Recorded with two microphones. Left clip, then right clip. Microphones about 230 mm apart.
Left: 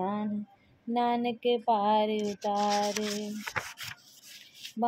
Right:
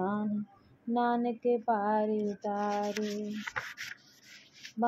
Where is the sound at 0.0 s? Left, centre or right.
Left.